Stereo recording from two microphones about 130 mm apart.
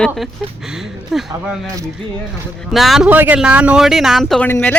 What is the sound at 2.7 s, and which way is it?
Speech, centre (ahead or behind).